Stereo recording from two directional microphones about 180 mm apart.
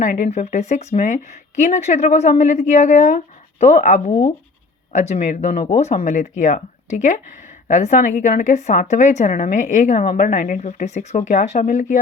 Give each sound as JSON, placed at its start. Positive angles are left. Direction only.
{"t": 0.0, "sound": "a woman's voice", "side_deg": 45}